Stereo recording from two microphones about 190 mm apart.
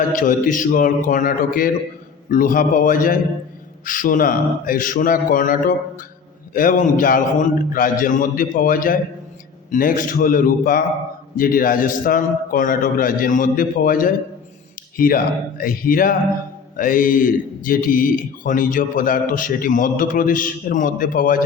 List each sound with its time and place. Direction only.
0.1 s speech: 45° left (ahead or behind)